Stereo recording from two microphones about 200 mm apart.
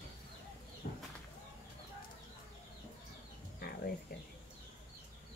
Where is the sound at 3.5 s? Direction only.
50° left (ahead or behind).